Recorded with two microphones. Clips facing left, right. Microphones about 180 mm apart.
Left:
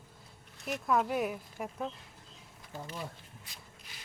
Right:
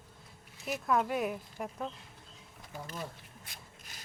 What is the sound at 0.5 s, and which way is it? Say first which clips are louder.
Speech: even; centre (ahead or behind).